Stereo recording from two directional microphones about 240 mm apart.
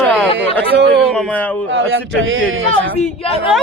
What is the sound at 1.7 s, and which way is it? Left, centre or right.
Speech, right.